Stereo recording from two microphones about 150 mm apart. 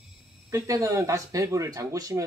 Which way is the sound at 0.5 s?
20° right (ahead or behind).